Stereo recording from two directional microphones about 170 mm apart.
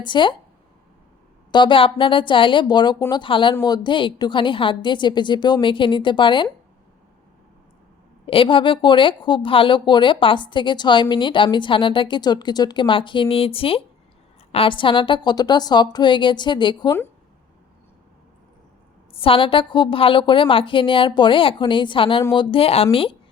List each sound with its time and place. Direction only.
0.0 s speech: 30° left (ahead or behind)
1.5 s speech: 25° left (ahead or behind)
8.3 s speech: 30° left (ahead or behind)
19.1 s a woman's voice: 35° left (ahead or behind)